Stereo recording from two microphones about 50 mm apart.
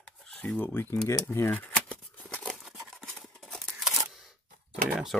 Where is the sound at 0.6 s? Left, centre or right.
Left.